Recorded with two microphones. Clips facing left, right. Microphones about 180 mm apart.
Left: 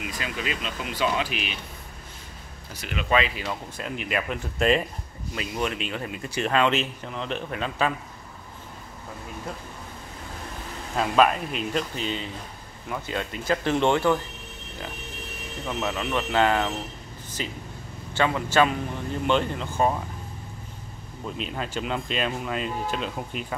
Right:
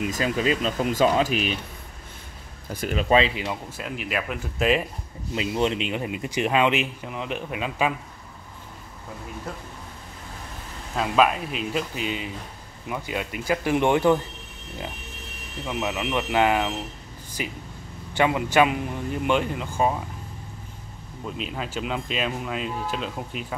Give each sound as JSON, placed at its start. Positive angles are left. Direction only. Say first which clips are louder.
{"t": 0.1, "sound": "speech", "louder": "right 8 dB", "side_deg": -35}
{"t": 2.7, "sound": "speech", "louder": "right 4 dB", "side_deg": -45}
{"t": 3.7, "sound": "speech", "louder": "even", "side_deg": -5}
{"t": 5.3, "sound": "speech", "louder": "right 5 dB", "side_deg": -25}
{"t": 11.0, "sound": "speech", "louder": "even", "side_deg": -5}
{"t": 15.6, "sound": "speech", "louder": "right 1 dB", "side_deg": -10}
{"t": 21.4, "sound": "speech", "louder": "even", "side_deg": -5}